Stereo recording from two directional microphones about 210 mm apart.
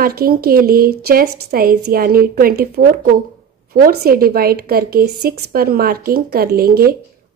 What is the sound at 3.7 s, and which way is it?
A woman's voice, 45° right (ahead or behind).